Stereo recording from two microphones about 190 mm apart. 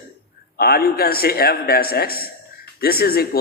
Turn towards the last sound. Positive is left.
turn(degrees=55)  # may be behind; listen again after turning